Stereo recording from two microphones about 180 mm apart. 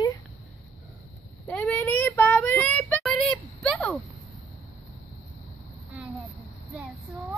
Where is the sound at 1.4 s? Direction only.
5° left (ahead or behind).